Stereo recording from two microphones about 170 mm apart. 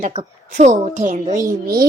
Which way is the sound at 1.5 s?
60° right (ahead or behind).